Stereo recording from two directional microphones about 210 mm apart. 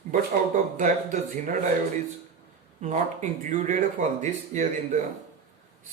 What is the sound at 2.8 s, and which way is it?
Speech, 35° right (ahead or behind).